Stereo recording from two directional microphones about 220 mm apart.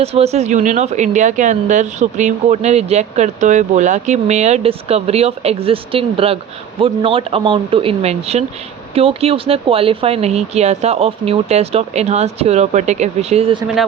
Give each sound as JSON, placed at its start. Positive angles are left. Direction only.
{"t": 0.0, "sound": "a woman's voice", "side_deg": -30}